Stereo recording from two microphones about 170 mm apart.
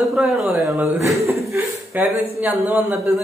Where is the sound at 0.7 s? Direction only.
15° right (ahead or behind).